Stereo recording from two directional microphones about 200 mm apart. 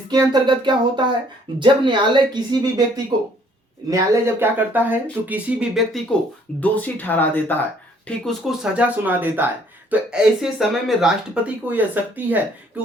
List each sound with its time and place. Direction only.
0.1 s speech: 20° right (ahead or behind); by 6.0 s 5° right (ahead or behind)
6.6 s speech: 10° left (ahead or behind); by 12.4 s 10° right (ahead or behind)